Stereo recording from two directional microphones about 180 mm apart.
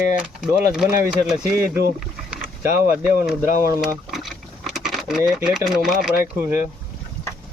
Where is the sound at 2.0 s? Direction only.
Centre (ahead or behind).